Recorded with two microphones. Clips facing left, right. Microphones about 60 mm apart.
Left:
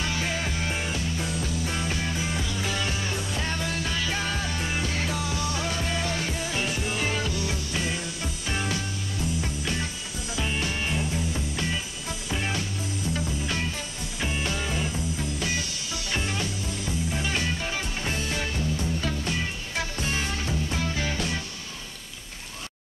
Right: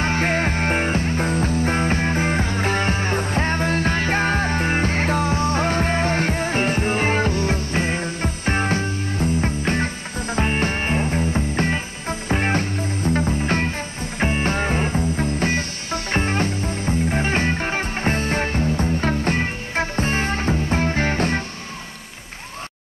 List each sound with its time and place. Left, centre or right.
0.0 s music: right